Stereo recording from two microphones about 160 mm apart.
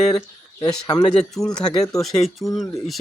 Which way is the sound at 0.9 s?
25° left (ahead or behind).